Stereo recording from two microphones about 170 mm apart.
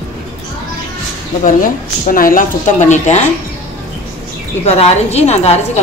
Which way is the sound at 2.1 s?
55° left (ahead or behind).